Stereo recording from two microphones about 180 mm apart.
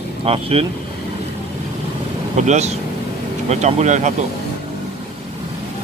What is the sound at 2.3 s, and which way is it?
Speech, 40° right (ahead or behind).